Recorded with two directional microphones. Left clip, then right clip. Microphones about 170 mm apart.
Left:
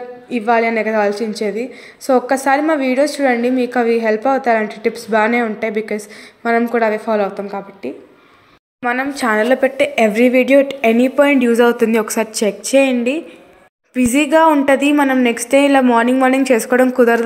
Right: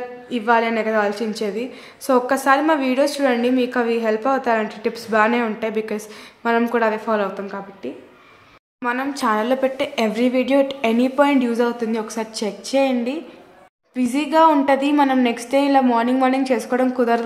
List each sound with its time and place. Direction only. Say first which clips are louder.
0.3 s a woman's voice: left 3 dB; 15° left (ahead or behind)
11.5 s a woman's voice: left 8 dB; 40° left (ahead or behind); by 15.3 s 15° left (ahead or behind)
15.3 s a woman's voice: left 5 dB; 25° left (ahead or behind)